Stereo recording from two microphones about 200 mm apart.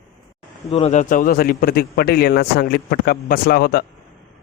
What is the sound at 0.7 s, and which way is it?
Speech, 35° left (ahead or behind).